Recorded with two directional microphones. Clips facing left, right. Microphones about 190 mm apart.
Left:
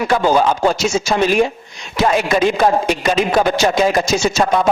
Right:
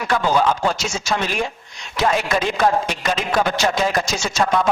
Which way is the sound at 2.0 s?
10° left (ahead or behind).